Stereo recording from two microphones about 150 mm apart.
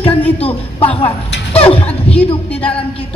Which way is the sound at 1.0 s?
40° left (ahead or behind).